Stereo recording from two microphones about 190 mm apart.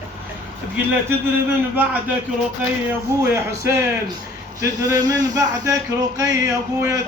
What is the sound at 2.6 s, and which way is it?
Speech, 5° right (ahead or behind).